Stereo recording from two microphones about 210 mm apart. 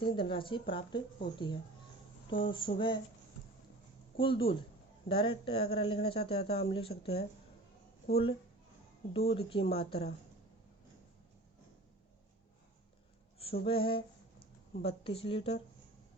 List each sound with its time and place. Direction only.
0.0 s speech: 25° left (ahead or behind)
4.2 s speech: 25° left (ahead or behind)
13.4 s speech: 25° left (ahead or behind)